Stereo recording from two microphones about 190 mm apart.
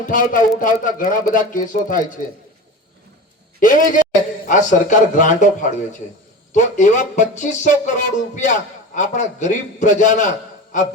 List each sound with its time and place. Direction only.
0.1 s speech: 45° left (ahead or behind)
3.6 s speech: 45° left (ahead or behind)